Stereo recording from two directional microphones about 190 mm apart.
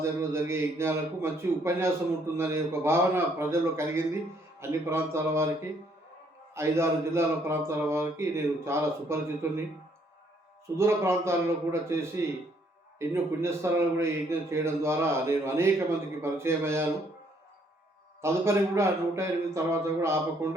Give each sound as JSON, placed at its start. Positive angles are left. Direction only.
{"t": 0.0, "sound": "speech", "side_deg": -15}
{"t": 6.5, "sound": "speech", "side_deg": -15}
{"t": 10.8, "sound": "speech", "side_deg": -15}
{"t": 18.2, "sound": "speech", "side_deg": -15}